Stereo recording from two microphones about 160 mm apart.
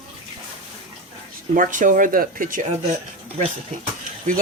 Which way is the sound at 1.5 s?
55° right (ahead or behind).